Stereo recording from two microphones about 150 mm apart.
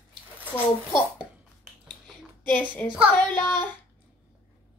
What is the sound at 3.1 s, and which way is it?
Child singing, 15° left (ahead or behind).